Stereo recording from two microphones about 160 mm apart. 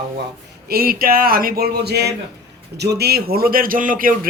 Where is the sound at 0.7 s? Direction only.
70° right (ahead or behind); by 2.1 s 90° right.